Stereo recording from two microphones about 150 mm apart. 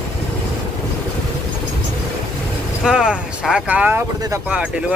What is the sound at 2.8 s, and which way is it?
Speech, 5° right (ahead or behind).